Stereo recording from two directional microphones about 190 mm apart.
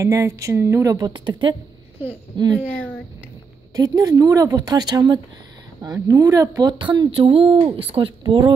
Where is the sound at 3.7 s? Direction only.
20° right (ahead or behind).